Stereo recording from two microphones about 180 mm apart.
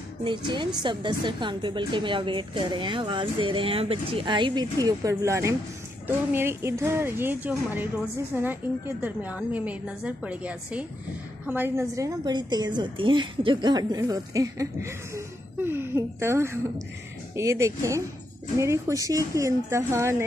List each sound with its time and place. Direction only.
0.2 s a woman's voice: 25° right (ahead or behind)